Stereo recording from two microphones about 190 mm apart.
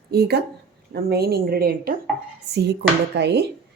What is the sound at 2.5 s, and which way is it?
Speech, 60° right (ahead or behind).